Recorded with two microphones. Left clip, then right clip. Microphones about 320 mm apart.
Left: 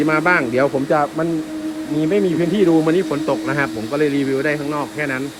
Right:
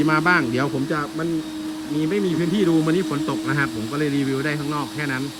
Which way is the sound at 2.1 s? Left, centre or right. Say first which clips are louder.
Left 6 dB; centre.